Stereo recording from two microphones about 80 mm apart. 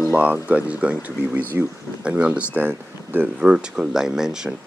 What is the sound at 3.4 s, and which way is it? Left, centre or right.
Speech, centre.